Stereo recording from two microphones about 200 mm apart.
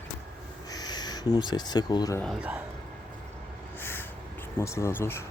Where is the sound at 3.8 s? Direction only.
10° left (ahead or behind).